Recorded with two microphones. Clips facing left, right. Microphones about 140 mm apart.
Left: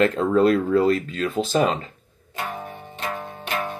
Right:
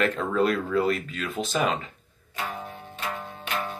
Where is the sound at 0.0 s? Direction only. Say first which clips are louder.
Left 6 dB; 30° left (ahead or behind).